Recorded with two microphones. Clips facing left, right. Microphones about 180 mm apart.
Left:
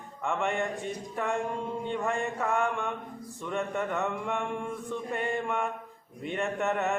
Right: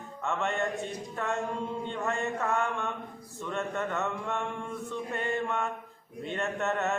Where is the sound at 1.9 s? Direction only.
15° left (ahead or behind).